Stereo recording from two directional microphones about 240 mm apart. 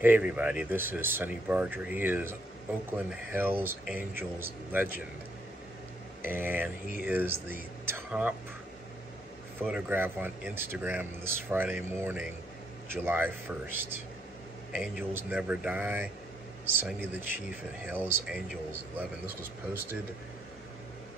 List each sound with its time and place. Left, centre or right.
0.0 s speech: centre
6.2 s speech: centre
9.6 s speech: centre